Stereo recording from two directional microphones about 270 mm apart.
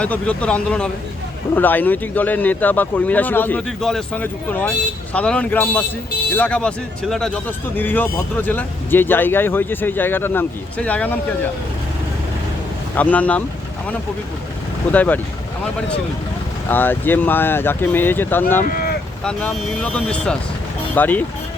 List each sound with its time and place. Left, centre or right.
0.0 s speech: centre
13.0 s speech: centre
14.9 s speech: centre
16.6 s speech: centre
18.7 s boat: left
19.2 s speech: centre